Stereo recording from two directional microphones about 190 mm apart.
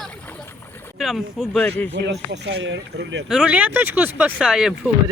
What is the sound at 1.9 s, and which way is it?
Speech, 65° right (ahead or behind).